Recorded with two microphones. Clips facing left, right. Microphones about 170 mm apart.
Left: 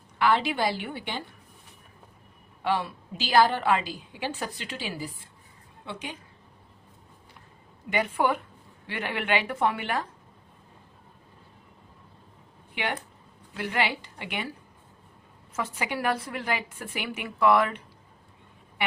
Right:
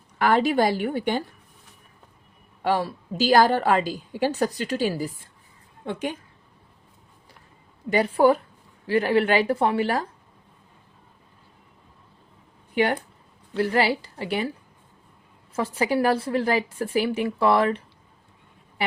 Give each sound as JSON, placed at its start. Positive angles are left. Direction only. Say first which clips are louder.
{"t": 0.2, "sound": "a woman's voice", "louder": "right 5 dB", "side_deg": -45}
{"t": 2.6, "sound": "a woman's voice", "louder": "right 4 dB", "side_deg": -40}
{"t": 7.9, "sound": "a woman's voice", "louder": "right 7 dB", "side_deg": -35}
{"t": 12.7, "sound": "a woman's voice", "louder": "right 9 dB", "side_deg": -40}
{"t": 15.5, "sound": "a woman's voice", "louder": "right 8 dB", "side_deg": -30}
{"t": 18.8, "sound": "a sound", "louder": "right 3 dB", "side_deg": -40}